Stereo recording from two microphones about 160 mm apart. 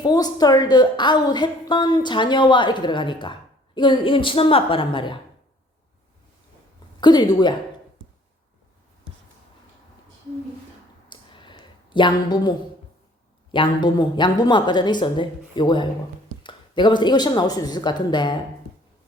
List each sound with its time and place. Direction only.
0.0 s a woman's voice: 25° left (ahead or behind)
7.0 s a woman's voice: 25° left (ahead or behind)
11.1 s a sound: 30° left (ahead or behind)
13.5 s a woman's voice: 30° left (ahead or behind)